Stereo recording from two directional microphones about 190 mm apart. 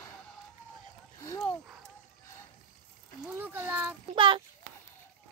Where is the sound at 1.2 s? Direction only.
15° left (ahead or behind).